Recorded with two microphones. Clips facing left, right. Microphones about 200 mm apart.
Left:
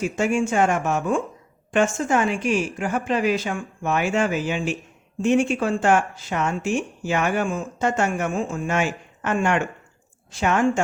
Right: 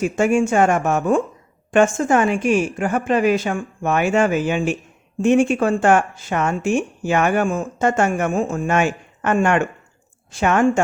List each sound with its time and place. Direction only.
0.0 s speech: 50° right (ahead or behind)